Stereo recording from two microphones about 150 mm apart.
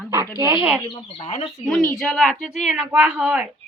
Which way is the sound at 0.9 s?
40° left (ahead or behind).